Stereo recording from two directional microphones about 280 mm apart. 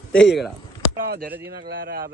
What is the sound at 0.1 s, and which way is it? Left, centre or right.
Speech, left.